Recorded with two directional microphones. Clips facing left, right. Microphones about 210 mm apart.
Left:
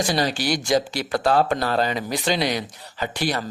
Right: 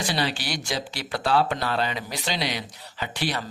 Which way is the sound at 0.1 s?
45° left (ahead or behind).